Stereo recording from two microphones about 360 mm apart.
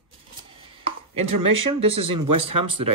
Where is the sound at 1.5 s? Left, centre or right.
Centre.